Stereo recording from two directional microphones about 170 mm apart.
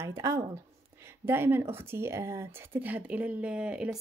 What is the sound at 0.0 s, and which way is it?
Speech, 15° right (ahead or behind).